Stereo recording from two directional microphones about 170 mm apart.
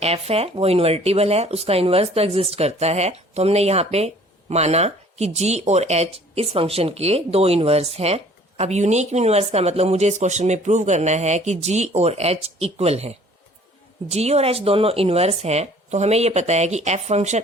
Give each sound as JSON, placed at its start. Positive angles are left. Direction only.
{"t": 0.0, "sound": "speech", "side_deg": -35}